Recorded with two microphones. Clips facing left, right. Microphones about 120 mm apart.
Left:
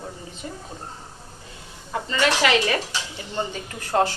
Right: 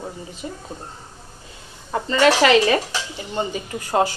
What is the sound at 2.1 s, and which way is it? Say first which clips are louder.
Speech: right 6 dB; 35° right (ahead or behind).